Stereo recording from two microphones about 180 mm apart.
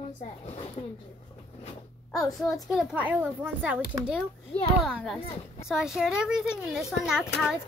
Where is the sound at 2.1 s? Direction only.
Centre (ahead or behind).